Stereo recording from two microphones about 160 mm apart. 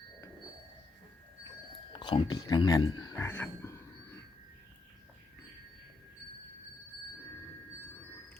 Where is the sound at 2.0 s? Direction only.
30° left (ahead or behind).